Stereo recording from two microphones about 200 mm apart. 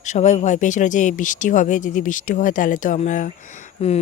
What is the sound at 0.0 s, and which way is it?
Speech, 35° left (ahead or behind).